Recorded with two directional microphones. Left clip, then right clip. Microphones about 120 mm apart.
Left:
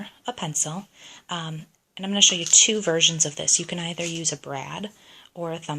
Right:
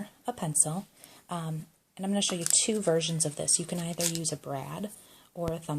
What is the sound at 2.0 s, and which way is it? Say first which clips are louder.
Speech: left 12 dB; 20° right (ahead or behind).